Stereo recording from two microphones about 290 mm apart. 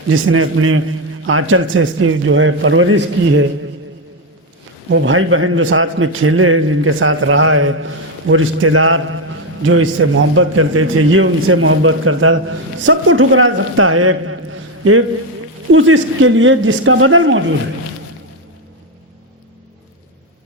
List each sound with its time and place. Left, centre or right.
0.1 s a man's voice: right
4.9 s a man's voice: right